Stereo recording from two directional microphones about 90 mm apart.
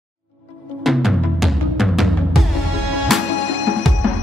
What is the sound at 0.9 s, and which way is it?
Music, centre (ahead or behind).